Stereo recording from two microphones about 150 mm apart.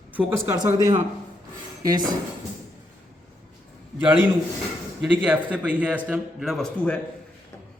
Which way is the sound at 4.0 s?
10° right (ahead or behind).